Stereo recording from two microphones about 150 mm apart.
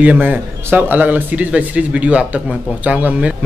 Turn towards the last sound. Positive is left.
turn(degrees=-10)  # may be behind; listen again after turning